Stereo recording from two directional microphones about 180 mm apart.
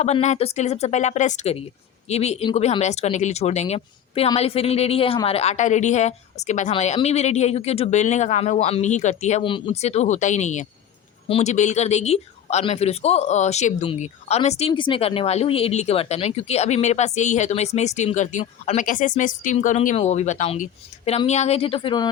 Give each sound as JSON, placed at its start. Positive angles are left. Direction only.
{"t": 0.0, "sound": "speech", "side_deg": 40}
{"t": 9.4, "sound": "speech", "side_deg": 30}